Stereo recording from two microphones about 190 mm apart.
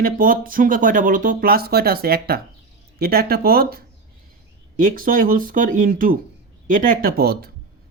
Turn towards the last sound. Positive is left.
turn(degrees=-55)  # may be behind; listen again after turning